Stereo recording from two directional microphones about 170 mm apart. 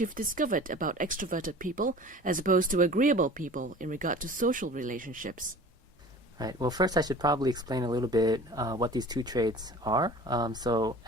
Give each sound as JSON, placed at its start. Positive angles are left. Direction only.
{"t": 0.0, "sound": "speech", "side_deg": -50}
{"t": 6.4, "sound": "speech", "side_deg": -25}